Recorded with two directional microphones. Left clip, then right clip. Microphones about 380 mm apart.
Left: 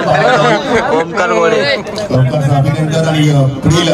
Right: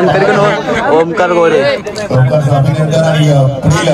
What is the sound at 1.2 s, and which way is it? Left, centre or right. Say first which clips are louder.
A man's voice: right 2 dB; centre.